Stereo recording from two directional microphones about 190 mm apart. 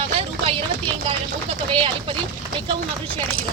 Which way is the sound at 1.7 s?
30° right (ahead or behind).